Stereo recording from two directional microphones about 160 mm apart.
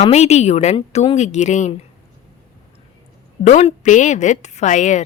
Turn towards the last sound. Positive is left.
turn(degrees=50)  # may be behind; listen again after turning